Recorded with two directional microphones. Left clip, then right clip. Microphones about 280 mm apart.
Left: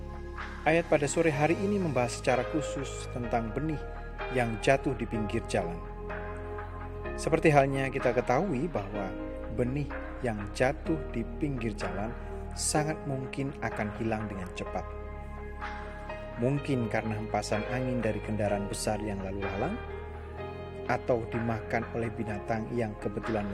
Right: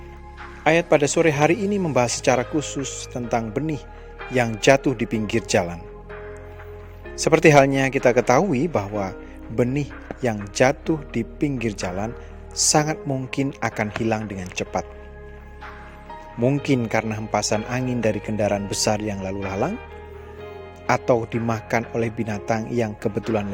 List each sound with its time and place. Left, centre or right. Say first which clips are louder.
0.6 s a man's voice: right 9 dB; right
7.2 s a man's voice: right 10 dB; right
16.4 s a man's voice: right 10 dB; right
20.8 s a man's voice: right 10 dB; right